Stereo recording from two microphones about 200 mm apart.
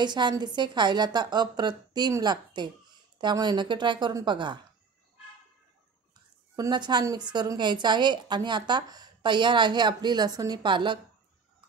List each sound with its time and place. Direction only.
0.0 s a woman's voice: 20° right (ahead or behind)
6.5 s a woman's voice: 20° right (ahead or behind)